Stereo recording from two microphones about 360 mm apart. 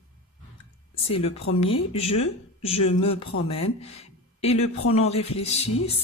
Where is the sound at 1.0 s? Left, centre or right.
Centre.